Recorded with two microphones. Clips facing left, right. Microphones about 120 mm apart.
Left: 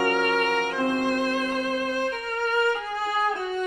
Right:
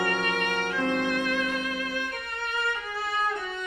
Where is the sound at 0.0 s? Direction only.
45° left (ahead or behind).